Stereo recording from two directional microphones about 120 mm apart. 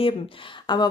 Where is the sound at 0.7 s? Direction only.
40° left (ahead or behind).